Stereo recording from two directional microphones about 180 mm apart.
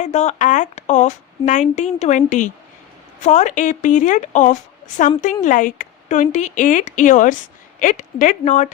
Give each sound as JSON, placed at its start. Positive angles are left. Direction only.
{"t": 0.0, "sound": "a woman's voice", "side_deg": 40}